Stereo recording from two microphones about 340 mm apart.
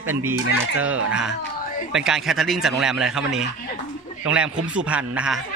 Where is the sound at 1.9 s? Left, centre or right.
Centre.